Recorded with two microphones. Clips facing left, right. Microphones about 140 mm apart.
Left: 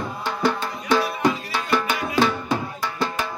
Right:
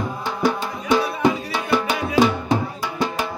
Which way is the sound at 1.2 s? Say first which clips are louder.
Right 2 dB; 15° right (ahead or behind).